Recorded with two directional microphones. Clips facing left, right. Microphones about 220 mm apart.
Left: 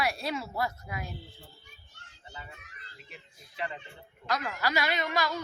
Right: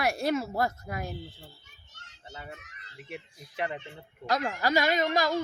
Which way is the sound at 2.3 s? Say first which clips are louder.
Right 4 dB; 70° right (ahead or behind).